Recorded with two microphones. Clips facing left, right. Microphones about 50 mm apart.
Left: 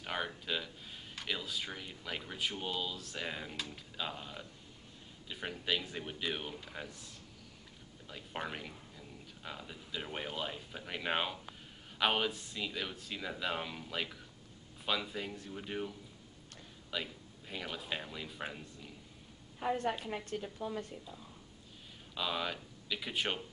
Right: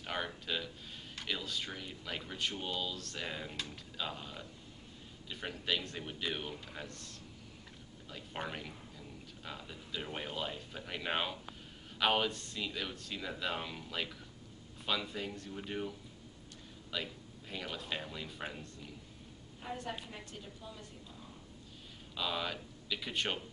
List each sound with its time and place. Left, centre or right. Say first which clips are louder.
0.0 s speech: left 1 dB; centre
16.9 s speech: even; centre
19.6 s a woman's voice: left 9 dB; left
20.1 s a woman's voice: left 8 dB; left
22.1 s speech: left 1 dB; centre